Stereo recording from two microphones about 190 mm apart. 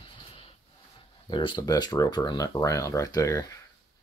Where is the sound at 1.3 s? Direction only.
25° left (ahead or behind).